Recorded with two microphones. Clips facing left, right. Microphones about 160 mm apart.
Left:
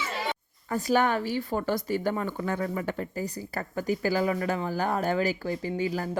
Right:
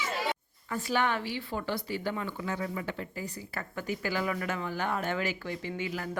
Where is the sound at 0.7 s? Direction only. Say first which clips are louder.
Left 5 dB; 40° left (ahead or behind).